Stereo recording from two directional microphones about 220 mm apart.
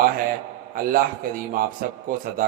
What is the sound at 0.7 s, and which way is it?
A man's voice, 40° right (ahead or behind).